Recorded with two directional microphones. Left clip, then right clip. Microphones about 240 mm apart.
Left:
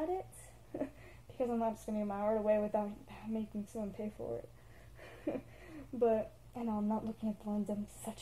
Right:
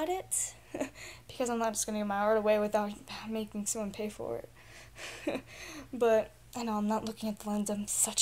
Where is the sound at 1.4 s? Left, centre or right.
Centre.